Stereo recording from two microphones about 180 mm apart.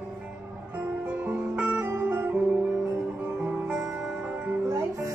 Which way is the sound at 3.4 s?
5° right (ahead or behind).